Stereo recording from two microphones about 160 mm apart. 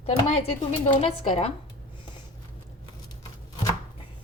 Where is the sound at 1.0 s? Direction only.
40° left (ahead or behind).